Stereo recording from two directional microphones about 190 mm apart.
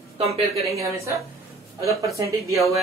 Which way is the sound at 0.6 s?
15° right (ahead or behind).